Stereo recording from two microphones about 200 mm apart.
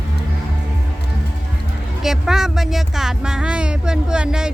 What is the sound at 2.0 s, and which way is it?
Speech, centre (ahead or behind).